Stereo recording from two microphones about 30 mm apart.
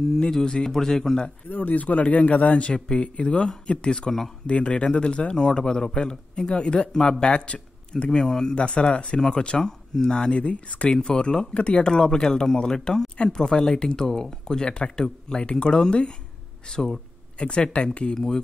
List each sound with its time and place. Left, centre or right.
0.1 s a man's voice: centre
1.5 s a man's voice: left
4.5 s speech: left
5.4 s speech: left
5.9 s speech: left
8.2 s a man's voice: centre
8.5 s speech: left
9.6 s speech: centre
10.0 s speech: left
10.4 s a man's voice: left
11.0 s speech: left
11.8 s speech: left
17.4 s speech: left
18.1 s speech: centre